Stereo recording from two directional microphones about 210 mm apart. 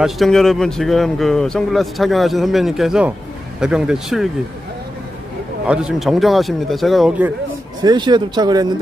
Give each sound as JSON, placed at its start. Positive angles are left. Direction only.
{"t": 0.0, "sound": "speech", "side_deg": 0}
{"t": 5.7, "sound": "speech", "side_deg": -5}
{"t": 7.8, "sound": "speech", "side_deg": -20}